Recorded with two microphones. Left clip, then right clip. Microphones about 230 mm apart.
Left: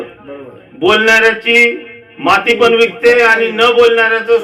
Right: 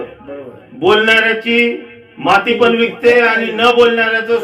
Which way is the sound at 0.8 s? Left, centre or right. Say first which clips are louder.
Left 2 dB; left.